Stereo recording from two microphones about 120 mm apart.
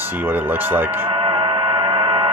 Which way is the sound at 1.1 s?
45° right (ahead or behind).